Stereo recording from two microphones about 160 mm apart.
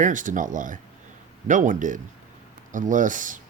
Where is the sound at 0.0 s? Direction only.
55° right (ahead or behind).